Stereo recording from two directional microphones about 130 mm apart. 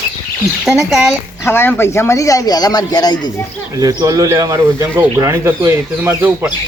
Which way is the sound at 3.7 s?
25° right (ahead or behind).